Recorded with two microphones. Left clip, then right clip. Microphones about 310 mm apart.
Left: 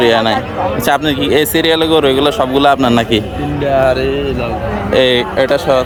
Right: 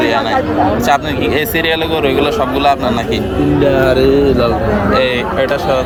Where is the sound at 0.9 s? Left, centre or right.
Left.